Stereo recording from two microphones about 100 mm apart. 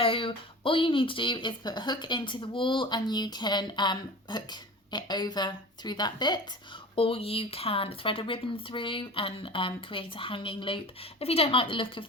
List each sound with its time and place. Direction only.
0.0 s speech: 60° left (ahead or behind); by 6.4 s 45° left (ahead or behind)
6.9 s speech: 70° left (ahead or behind)
11.2 s speech: 80° left; by 12.0 s 60° left (ahead or behind)